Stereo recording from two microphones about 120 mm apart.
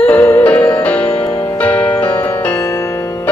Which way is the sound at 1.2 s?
45° left (ahead or behind).